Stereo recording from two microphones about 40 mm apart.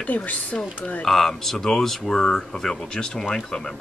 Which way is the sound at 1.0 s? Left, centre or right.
Centre.